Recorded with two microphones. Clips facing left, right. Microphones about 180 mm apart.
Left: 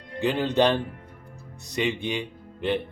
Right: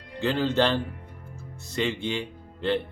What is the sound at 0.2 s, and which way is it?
Speech, 15° left (ahead or behind).